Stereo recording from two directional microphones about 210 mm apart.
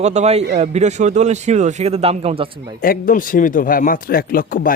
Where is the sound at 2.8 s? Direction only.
40° left (ahead or behind).